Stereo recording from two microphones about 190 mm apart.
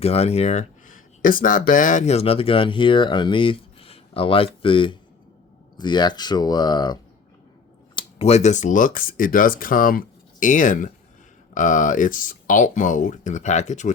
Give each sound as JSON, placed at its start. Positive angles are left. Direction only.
{"t": 0.0, "sound": "speech", "side_deg": 30}
{"t": 7.9, "sound": "speech", "side_deg": 35}